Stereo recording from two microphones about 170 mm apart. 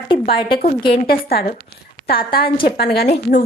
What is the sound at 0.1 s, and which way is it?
Speech, 30° left (ahead or behind).